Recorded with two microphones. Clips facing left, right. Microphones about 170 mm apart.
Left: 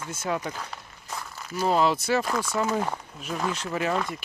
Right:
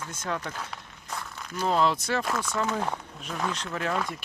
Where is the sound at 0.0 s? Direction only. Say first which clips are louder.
Left 3 dB; 10° left (ahead or behind).